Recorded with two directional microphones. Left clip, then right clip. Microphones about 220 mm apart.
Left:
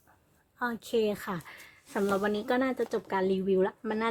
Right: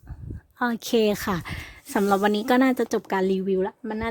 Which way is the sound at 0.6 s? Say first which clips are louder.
Right 7 dB; 40° right (ahead or behind).